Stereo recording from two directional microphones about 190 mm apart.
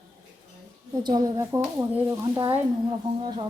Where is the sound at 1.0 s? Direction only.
20° right (ahead or behind).